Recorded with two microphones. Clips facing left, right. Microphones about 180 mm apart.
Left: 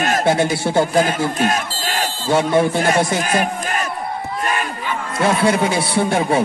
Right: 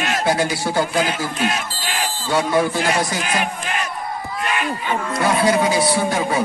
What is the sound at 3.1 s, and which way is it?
Speech, 45° left (ahead or behind).